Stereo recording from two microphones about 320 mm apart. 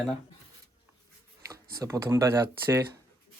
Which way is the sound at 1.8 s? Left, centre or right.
Centre.